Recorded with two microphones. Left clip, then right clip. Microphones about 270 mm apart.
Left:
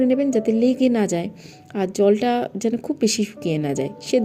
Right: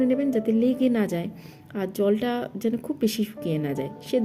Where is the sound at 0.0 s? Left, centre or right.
Centre.